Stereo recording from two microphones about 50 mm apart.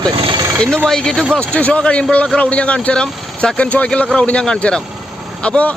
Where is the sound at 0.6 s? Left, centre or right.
Centre.